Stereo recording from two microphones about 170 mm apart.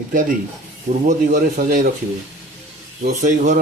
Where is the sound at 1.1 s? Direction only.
50° right (ahead or behind).